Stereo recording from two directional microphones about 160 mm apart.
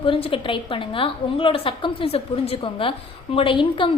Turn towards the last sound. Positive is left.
turn(degrees=30)  # may be behind; listen again after turning